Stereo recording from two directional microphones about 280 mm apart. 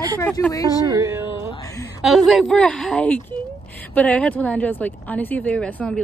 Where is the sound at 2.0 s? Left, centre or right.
Centre.